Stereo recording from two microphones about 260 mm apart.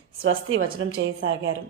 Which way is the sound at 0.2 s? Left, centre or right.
Right.